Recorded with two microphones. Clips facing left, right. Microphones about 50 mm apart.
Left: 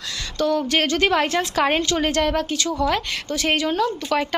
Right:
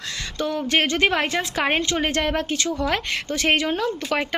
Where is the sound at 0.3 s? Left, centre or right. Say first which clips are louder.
Left 2 dB; right.